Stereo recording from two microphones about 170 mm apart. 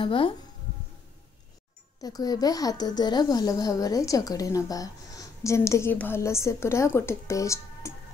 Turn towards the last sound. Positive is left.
turn(degrees=20)  # may be behind; listen again after turning